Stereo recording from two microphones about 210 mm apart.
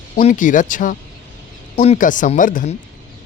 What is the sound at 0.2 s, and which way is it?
Speech, 35° left (ahead or behind).